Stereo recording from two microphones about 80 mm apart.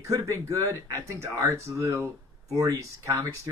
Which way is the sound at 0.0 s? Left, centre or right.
Right.